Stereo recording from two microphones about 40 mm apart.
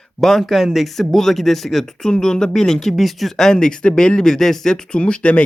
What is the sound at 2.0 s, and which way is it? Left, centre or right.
Speech, centre.